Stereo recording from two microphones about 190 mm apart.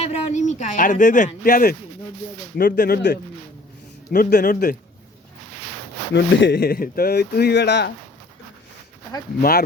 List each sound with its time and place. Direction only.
0.0 s a man's voice: 35° left (ahead or behind)
6.1 s speech: 65° left (ahead or behind)
9.4 s a man's voice: 50° left (ahead or behind)